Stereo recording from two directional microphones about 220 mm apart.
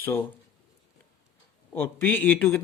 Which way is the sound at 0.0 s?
10° left (ahead or behind).